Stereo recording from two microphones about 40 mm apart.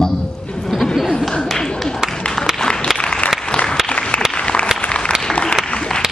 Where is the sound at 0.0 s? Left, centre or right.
Centre.